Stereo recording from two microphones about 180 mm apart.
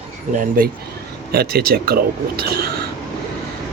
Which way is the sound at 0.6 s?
50° right (ahead or behind).